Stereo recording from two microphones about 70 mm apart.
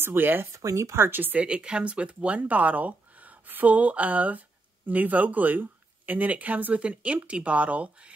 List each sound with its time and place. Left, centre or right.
0.0 s speech: right
0.5 s speech: right
1.4 s speech: centre